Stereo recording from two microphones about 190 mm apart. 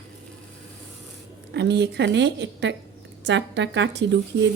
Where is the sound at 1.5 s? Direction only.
65° right (ahead or behind).